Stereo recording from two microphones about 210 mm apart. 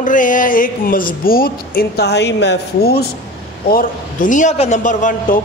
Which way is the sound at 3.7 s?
40° left (ahead or behind).